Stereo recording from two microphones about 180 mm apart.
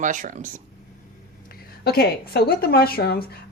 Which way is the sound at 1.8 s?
60° left (ahead or behind).